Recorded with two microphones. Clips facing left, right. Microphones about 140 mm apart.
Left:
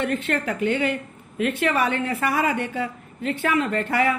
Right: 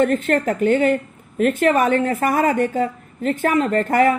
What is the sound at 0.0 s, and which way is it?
A woman's voice, 45° right (ahead or behind).